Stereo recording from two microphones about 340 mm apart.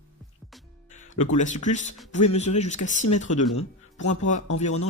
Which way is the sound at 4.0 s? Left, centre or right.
Left.